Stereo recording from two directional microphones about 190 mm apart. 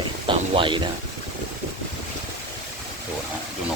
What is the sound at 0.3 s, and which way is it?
Speech, 25° right (ahead or behind).